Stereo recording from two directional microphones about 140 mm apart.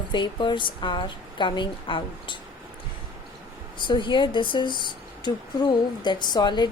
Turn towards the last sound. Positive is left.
turn(degrees=30)  # may be behind; listen again after turning